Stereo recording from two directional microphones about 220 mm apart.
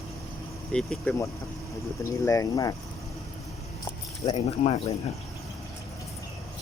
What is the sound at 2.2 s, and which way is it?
Speech, 15° left (ahead or behind).